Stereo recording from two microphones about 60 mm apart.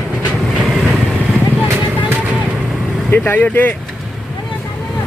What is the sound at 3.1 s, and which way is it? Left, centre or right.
Speech, left.